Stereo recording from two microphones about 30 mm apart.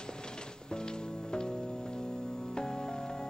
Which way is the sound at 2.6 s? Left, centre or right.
Left.